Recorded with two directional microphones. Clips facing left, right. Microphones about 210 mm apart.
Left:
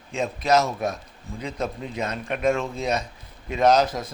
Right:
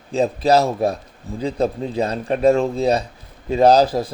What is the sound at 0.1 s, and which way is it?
Speech, 35° right (ahead or behind).